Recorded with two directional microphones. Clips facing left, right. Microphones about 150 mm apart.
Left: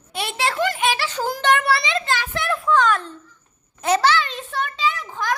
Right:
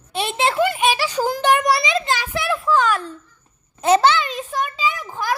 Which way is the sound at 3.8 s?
25° right (ahead or behind).